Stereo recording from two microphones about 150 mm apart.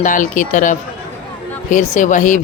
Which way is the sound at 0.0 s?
60° left (ahead or behind).